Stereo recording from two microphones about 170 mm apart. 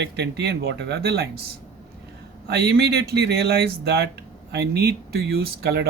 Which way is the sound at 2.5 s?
70° right (ahead or behind).